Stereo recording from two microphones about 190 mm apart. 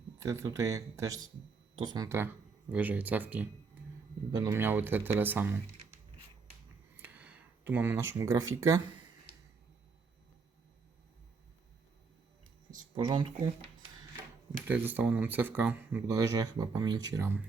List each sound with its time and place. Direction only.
0.2 s speech: 15° right (ahead or behind)
6.9 s a sound: 10° right (ahead or behind)
8.2 s speech: 15° right (ahead or behind)
9.3 s a sound: 30° left (ahead or behind)
13.0 s speech: 25° right (ahead or behind)
14.7 s speech: 10° right (ahead or behind)